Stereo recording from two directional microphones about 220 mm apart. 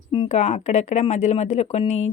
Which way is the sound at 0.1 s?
25° left (ahead or behind).